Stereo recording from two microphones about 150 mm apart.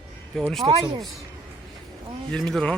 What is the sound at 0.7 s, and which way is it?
Speech, 35° right (ahead or behind).